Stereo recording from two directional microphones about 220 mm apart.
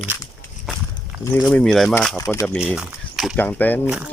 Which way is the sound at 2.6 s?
5° right (ahead or behind).